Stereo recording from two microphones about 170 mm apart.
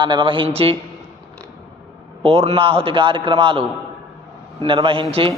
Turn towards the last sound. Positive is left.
turn(degrees=-30)  # may be behind; listen again after turning